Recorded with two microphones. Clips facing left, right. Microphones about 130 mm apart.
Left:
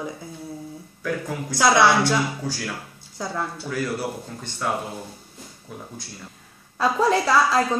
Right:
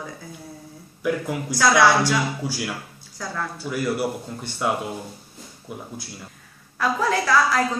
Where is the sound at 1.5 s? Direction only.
25° left (ahead or behind).